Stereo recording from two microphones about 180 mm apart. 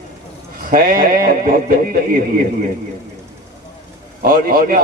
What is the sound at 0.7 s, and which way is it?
A man's voice, 55° right (ahead or behind).